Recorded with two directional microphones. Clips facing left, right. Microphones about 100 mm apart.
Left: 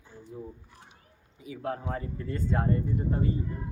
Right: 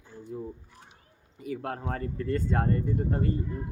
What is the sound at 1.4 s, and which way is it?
Speech, 60° right (ahead or behind).